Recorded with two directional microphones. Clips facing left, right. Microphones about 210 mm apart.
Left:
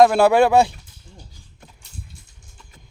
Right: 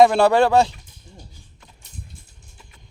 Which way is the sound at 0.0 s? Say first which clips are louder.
Left 1 dB; 5° left (ahead or behind).